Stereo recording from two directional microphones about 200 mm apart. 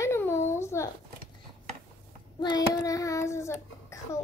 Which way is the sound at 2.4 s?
20° left (ahead or behind).